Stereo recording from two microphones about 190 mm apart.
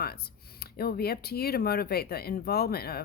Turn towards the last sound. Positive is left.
turn(degrees=55)  # may be behind; listen again after turning